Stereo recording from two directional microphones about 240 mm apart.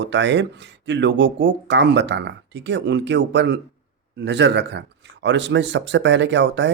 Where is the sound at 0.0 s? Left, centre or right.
Right.